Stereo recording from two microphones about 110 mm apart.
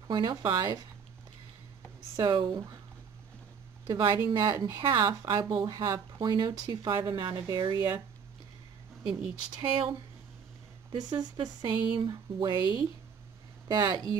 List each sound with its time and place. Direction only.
0.1 s speech: 40° right (ahead or behind)
2.1 s speech: 40° right (ahead or behind)
3.8 s a woman's voice: 45° right (ahead or behind)
4.4 s speech: 30° right (ahead or behind)
9.0 s speech: 35° right (ahead or behind)
10.9 s speech: 35° right (ahead or behind)
13.7 s speech: 40° right (ahead or behind)